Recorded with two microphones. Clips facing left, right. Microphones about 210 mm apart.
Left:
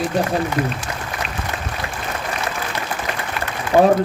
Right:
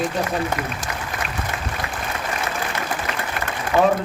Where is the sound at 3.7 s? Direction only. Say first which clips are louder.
Left 4 dB; 45° left (ahead or behind).